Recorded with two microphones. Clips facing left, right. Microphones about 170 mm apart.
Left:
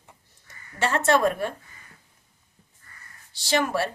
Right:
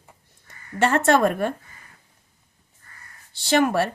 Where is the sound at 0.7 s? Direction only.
55° right (ahead or behind).